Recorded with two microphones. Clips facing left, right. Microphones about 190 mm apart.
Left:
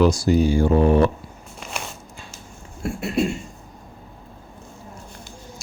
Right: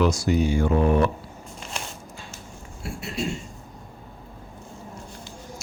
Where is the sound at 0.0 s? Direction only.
35° left (ahead or behind).